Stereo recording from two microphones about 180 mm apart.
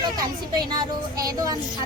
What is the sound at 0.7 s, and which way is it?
Speech, 20° right (ahead or behind).